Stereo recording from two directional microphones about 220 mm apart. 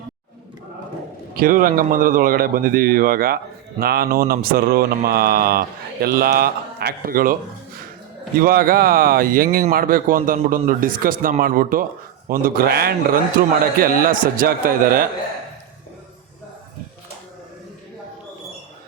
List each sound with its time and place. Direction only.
1.3 s a man's voice: 40° right (ahead or behind)
8.4 s a man's voice: 40° right (ahead or behind)